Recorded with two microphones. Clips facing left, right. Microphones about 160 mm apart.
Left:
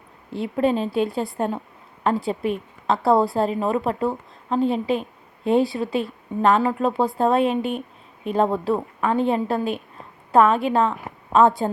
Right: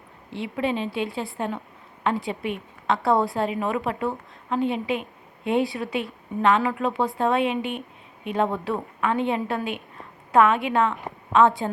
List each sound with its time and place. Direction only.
0.3 s a woman's voice: 40° left (ahead or behind)